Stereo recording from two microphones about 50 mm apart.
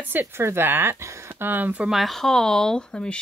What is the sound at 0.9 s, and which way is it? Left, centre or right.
Speech, right.